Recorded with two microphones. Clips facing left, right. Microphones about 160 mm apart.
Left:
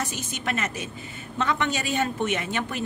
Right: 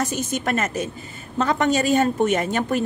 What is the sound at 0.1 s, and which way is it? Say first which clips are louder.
A woman's voice: right 7 dB; 45° right (ahead or behind).